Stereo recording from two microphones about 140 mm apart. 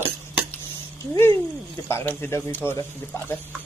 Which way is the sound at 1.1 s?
20° left (ahead or behind).